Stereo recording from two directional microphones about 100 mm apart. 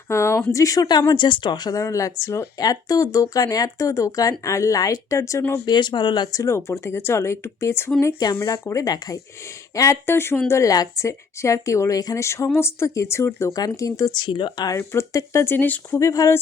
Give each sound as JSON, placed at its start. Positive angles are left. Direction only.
{"t": 0.1, "sound": "a sound", "side_deg": 30}
{"t": 0.5, "sound": "speech", "side_deg": 35}
{"t": 5.6, "sound": "speech", "side_deg": 50}
{"t": 6.3, "sound": "a woman's voice", "side_deg": 30}
{"t": 8.2, "sound": "a woman's voice", "side_deg": 40}
{"t": 10.5, "sound": "a woman's voice", "side_deg": 35}
{"t": 14.8, "sound": "a woman's voice", "side_deg": 30}
{"t": 15.5, "sound": "speech", "side_deg": 15}
{"t": 16.0, "sound": "speech", "side_deg": 30}